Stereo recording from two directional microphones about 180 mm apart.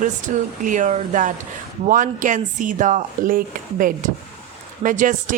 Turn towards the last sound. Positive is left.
turn(degrees=-45)  # may be behind; listen again after turning